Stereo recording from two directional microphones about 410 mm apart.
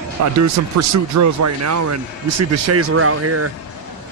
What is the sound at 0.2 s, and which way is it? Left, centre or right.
Speech, right.